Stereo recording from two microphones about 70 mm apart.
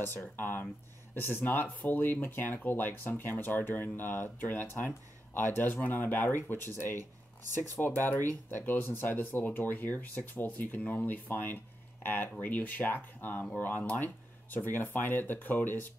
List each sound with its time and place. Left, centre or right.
0.4 s speech: left
7.9 s speech: left